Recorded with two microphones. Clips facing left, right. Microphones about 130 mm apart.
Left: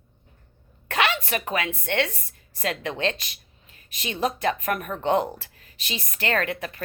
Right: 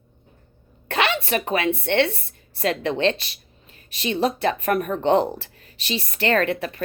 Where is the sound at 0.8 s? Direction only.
25° right (ahead or behind).